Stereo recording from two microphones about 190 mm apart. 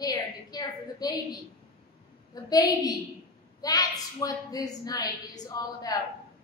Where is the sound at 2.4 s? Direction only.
20° left (ahead or behind).